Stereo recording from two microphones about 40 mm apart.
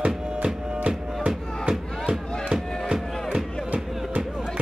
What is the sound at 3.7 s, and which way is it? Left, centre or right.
Music, right.